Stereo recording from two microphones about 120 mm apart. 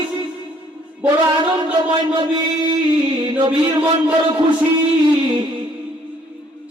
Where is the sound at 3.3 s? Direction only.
40° right (ahead or behind).